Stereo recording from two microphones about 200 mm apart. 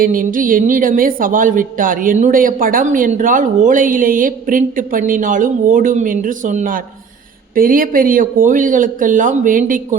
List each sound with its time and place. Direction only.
0.0 s a woman's voice: 45° right (ahead or behind)